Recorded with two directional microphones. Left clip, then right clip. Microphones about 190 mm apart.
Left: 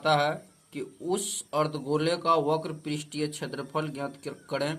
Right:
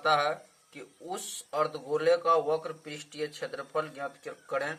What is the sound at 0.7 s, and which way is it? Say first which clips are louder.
Speech: left 8 dB; 20° left (ahead or behind).